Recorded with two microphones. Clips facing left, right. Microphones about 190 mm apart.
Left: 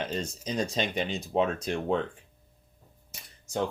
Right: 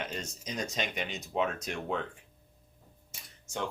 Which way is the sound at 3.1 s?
35° left (ahead or behind).